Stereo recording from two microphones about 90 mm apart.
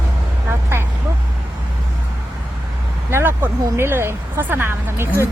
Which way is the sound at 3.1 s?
25° right (ahead or behind).